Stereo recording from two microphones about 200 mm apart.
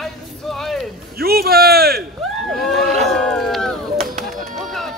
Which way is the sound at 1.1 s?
50° right (ahead or behind).